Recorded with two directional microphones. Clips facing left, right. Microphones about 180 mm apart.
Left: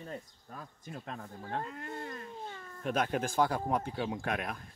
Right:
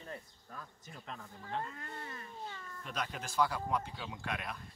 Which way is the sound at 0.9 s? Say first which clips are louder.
Left 7 dB; 45° left (ahead or behind).